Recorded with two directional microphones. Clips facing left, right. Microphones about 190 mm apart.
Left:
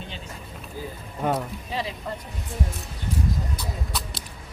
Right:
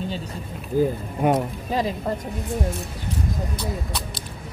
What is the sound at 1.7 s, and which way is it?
Speech, 45° right (ahead or behind).